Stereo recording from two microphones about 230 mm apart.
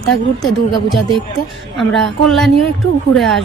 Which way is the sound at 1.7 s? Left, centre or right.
Centre.